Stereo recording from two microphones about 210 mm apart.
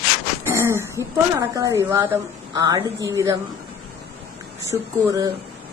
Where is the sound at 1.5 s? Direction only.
15° right (ahead or behind).